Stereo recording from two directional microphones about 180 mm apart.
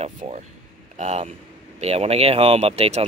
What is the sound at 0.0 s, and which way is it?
Speech, 35° right (ahead or behind).